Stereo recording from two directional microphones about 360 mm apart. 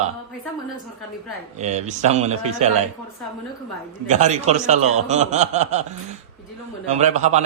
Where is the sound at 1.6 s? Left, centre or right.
Centre.